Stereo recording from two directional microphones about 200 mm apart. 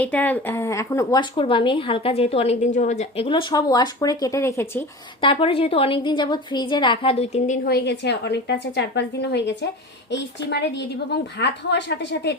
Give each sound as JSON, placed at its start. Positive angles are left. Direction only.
{"t": 0.0, "sound": "a woman's voice", "side_deg": 10}
{"t": 5.2, "sound": "a woman's voice", "side_deg": 25}